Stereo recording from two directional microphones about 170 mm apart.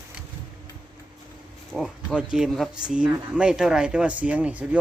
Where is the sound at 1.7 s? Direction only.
Centre (ahead or behind).